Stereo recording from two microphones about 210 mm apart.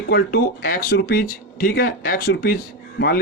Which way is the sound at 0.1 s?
50° left (ahead or behind).